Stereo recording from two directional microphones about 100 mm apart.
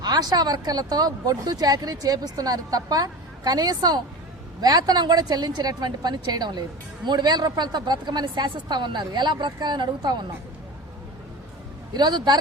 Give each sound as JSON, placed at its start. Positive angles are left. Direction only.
{"t": 0.0, "sound": "a woman's voice", "side_deg": -45}
{"t": 11.9, "sound": "a woman's voice", "side_deg": -45}